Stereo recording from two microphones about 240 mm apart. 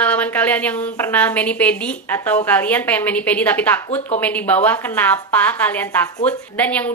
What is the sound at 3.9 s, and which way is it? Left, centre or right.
Speech, left.